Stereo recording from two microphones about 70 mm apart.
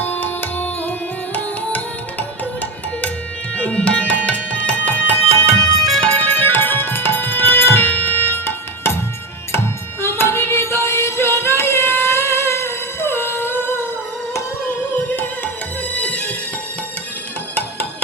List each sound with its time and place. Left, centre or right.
0.0 s music: left
10.0 s music: left
15.9 s music: centre